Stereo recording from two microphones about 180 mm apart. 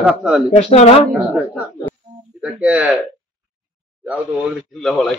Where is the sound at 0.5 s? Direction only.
40° left (ahead or behind).